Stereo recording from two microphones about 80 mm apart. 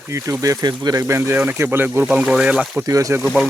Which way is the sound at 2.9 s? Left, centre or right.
Right.